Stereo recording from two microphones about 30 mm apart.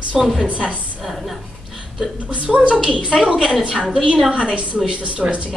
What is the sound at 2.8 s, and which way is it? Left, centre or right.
Speech, right.